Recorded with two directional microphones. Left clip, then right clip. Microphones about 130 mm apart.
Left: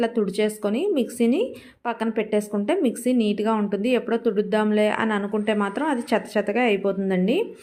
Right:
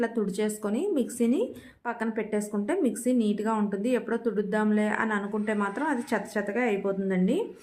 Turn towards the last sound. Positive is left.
turn(degrees=30)  # may be behind; listen again after turning